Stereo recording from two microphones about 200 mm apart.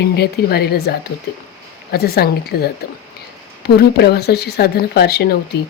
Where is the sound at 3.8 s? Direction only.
55° left (ahead or behind).